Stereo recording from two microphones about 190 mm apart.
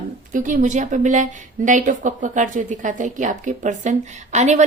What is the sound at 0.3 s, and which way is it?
A woman's voice, 45° right (ahead or behind).